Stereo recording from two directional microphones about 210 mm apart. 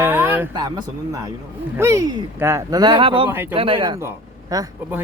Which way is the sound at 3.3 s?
10° right (ahead or behind).